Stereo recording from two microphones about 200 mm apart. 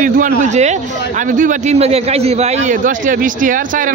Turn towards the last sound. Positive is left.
turn(degrees=-40)  # may be behind; listen again after turning